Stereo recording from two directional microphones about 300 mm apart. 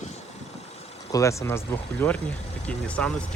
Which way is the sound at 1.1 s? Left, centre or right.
Centre.